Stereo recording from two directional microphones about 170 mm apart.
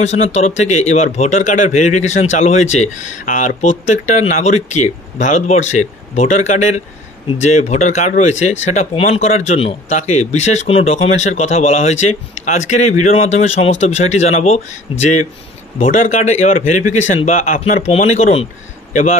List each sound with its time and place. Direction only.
0.0 s speech: 40° left (ahead or behind)
17.7 s speech: 40° left (ahead or behind)